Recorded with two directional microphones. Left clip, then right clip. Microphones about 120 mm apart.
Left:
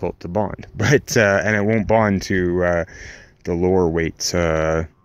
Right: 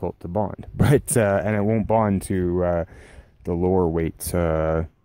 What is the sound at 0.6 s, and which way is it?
Speech, 30° right (ahead or behind).